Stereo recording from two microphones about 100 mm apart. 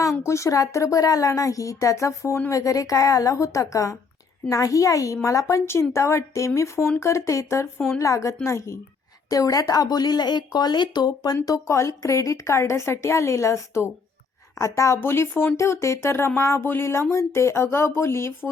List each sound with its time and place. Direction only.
0.3 s a woman's voice: 30° left (ahead or behind)